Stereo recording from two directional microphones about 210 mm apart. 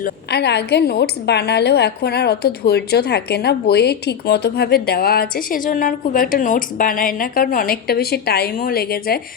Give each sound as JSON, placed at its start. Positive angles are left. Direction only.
{"t": 0.0, "sound": "a woman's voice", "side_deg": 50}